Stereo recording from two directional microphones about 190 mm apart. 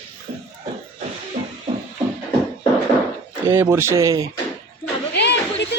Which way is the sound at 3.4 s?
15° right (ahead or behind).